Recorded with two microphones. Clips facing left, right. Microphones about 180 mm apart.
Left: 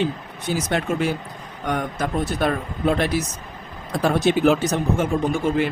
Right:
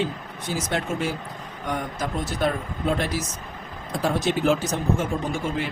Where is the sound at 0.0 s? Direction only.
65° left (ahead or behind).